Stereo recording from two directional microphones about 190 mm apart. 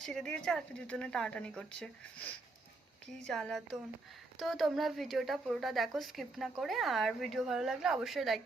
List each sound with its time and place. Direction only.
0.0 s speech: centre (ahead or behind)